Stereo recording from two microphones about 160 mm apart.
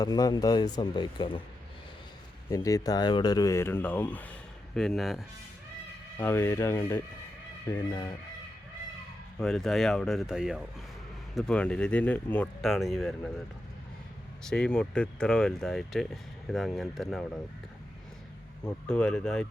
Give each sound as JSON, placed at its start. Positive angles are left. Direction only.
{"t": 0.0, "sound": "speech", "side_deg": 25}
{"t": 2.5, "sound": "speech", "side_deg": 20}
{"t": 6.1, "sound": "speech", "side_deg": 15}
{"t": 9.4, "sound": "speech", "side_deg": 5}
{"t": 14.5, "sound": "speech", "side_deg": 5}
{"t": 18.9, "sound": "speech", "side_deg": 5}